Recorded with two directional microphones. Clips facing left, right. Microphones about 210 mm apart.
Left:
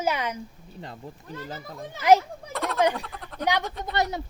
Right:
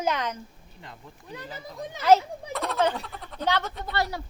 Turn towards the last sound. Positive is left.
turn(degrees=20)  # may be behind; listen again after turning